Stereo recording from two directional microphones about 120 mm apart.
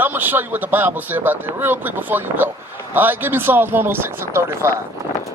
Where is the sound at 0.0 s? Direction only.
15° right (ahead or behind).